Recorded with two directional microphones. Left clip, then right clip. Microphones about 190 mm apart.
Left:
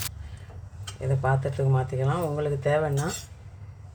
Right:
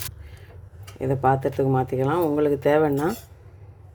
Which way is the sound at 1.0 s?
45° right (ahead or behind).